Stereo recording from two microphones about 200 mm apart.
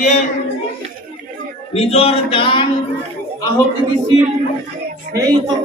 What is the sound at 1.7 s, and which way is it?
Speech, 30° left (ahead or behind).